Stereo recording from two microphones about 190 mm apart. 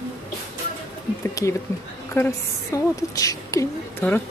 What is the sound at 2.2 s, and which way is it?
A woman's voice, 10° left (ahead or behind).